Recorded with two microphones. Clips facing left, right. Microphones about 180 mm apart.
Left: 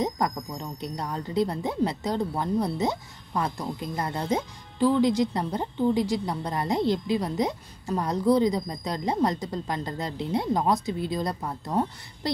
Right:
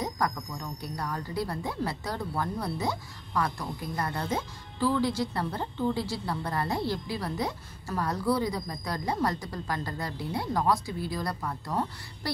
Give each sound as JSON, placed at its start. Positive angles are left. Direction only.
{"t": 0.0, "sound": "speech", "side_deg": 20}